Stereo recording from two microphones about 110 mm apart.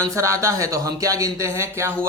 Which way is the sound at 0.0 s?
30° right (ahead or behind).